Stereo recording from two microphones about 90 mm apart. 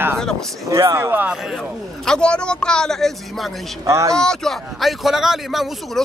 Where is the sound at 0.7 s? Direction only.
35° right (ahead or behind).